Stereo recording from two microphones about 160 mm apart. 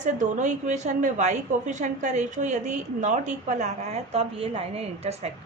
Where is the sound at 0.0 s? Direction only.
50° right (ahead or behind).